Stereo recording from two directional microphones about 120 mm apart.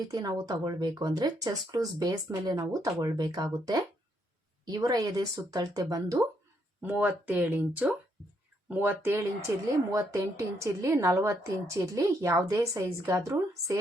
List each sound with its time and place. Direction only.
0.1 s speech: 35° right (ahead or behind)
6.8 s a woman's voice: 15° right (ahead or behind)